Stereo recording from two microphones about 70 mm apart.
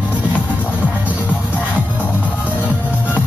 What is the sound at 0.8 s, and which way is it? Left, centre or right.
Music, right.